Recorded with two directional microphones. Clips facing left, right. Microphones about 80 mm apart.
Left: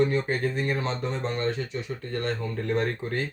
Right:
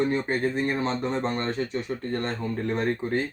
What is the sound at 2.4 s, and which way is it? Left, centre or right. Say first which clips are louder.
Speech: even; right.